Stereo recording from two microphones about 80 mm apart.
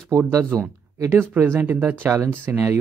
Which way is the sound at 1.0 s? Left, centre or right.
Right.